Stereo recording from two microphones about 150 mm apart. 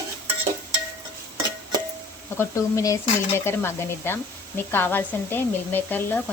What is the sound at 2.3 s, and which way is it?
Dishes, 20° left (ahead or behind).